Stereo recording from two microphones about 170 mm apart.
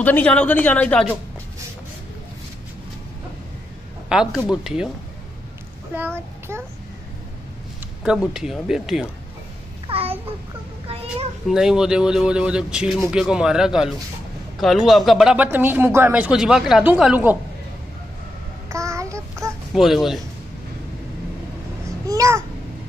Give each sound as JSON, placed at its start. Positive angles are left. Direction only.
{"t": 0.0, "sound": "speech", "side_deg": 10}
{"t": 4.1, "sound": "speech", "side_deg": -5}
{"t": 5.9, "sound": "a child's voice", "side_deg": -15}
{"t": 8.0, "sound": "speech", "side_deg": -5}
{"t": 9.8, "sound": "babbling", "side_deg": -35}
{"t": 11.4, "sound": "speech", "side_deg": -5}
{"t": 18.7, "sound": "child singing", "side_deg": -15}
{"t": 19.7, "sound": "speech", "side_deg": 0}
{"t": 22.0, "sound": "babbling", "side_deg": -20}